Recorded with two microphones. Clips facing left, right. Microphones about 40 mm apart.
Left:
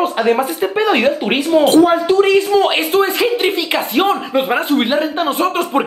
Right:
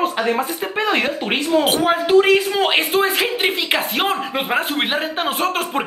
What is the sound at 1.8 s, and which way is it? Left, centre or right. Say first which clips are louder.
Speech: left 2 dB; right.